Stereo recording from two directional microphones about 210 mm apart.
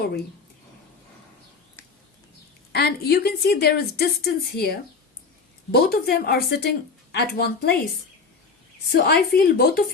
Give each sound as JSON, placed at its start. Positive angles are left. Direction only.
{"t": 2.7, "sound": "a woman's voice", "side_deg": 50}
{"t": 8.9, "sound": "a woman's voice", "side_deg": 45}